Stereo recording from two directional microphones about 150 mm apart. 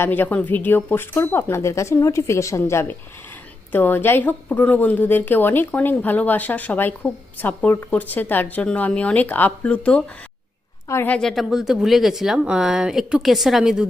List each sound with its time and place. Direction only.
0.0 s a woman's voice: 10° left (ahead or behind)